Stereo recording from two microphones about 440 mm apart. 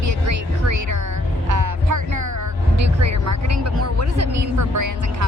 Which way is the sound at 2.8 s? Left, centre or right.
Right.